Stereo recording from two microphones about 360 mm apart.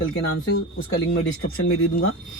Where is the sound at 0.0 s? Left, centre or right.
Left.